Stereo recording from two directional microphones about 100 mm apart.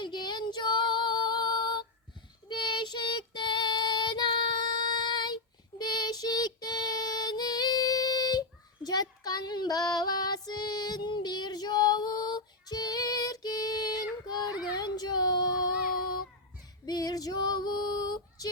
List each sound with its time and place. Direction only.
0.0 s female singing: 50° left (ahead or behind)
2.5 s child singing: 50° left (ahead or behind)
16.8 s female singing: 40° left (ahead or behind)